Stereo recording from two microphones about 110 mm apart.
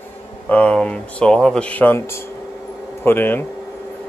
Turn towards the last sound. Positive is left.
turn(degrees=20)  # may be behind; listen again after turning